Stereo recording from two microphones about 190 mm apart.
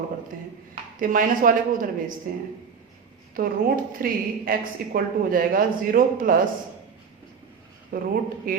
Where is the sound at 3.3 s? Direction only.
50° right (ahead or behind).